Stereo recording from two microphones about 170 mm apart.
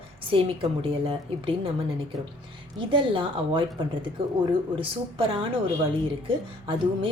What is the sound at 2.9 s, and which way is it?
A woman's voice, 30° right (ahead or behind).